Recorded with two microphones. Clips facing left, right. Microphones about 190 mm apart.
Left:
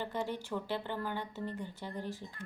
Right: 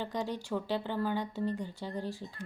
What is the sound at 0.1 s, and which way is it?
A woman's voice, 15° right (ahead or behind).